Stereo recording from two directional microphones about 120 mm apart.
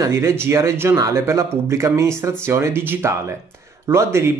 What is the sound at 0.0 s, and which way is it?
Speech, 20° right (ahead or behind).